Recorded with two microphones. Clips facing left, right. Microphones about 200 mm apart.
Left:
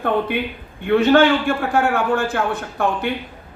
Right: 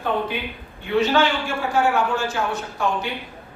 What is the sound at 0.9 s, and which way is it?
A man's voice, 55° left (ahead or behind).